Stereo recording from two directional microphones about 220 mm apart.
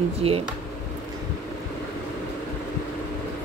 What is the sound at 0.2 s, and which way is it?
Speech, 25° right (ahead or behind).